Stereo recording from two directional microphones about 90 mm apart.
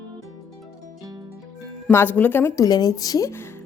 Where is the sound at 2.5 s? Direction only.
45° left (ahead or behind).